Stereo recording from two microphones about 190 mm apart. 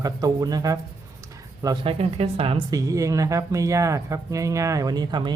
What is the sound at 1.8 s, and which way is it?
A woman's voice, 30° right (ahead or behind).